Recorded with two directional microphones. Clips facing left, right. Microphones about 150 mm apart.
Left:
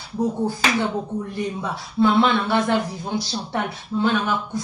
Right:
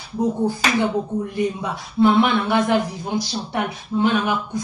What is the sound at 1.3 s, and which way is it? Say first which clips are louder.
A woman's voice: right 3 dB; 15° right (ahead or behind).